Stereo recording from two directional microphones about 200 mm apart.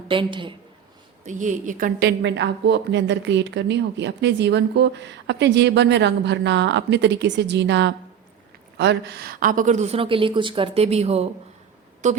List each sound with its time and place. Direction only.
0.1 s a woman's voice: 25° right (ahead or behind)
1.2 s a woman's voice: 40° right (ahead or behind)